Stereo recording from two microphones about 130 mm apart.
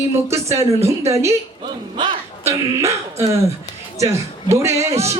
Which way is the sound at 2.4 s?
20° right (ahead or behind).